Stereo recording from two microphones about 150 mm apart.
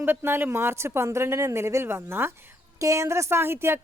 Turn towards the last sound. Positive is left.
turn(degrees=-15)  # may be behind; listen again after turning